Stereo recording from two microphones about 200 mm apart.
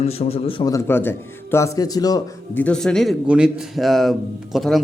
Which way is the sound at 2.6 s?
5° left (ahead or behind).